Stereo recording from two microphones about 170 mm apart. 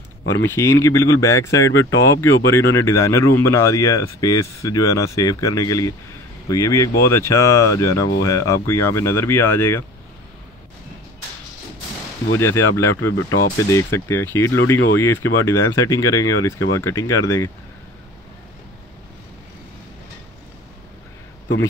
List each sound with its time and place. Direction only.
0.3 s speech: 15° left (ahead or behind)
12.4 s speech: 15° left (ahead or behind)